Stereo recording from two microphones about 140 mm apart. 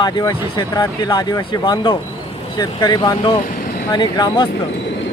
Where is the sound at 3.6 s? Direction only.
90° left.